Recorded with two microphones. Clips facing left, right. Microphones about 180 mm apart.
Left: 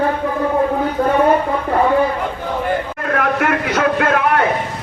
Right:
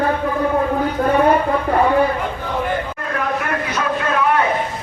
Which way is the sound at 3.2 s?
75° left (ahead or behind).